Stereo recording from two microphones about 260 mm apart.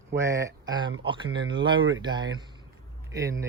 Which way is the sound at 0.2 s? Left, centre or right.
Centre.